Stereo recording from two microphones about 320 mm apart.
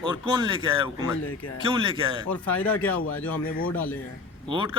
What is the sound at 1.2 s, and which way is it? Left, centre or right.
Speech, left.